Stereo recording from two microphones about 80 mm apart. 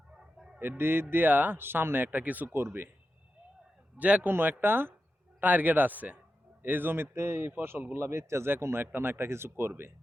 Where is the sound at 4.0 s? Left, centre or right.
Centre.